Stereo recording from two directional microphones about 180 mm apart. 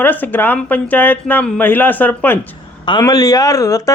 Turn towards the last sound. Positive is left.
turn(degrees=20)  # may be behind; listen again after turning